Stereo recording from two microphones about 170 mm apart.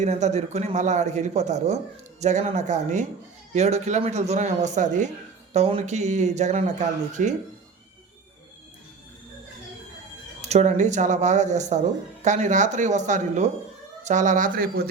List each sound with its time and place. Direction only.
0.0 s speech: 45° right (ahead or behind)
10.4 s speech: 40° right (ahead or behind); by 14.8 s 60° right (ahead or behind)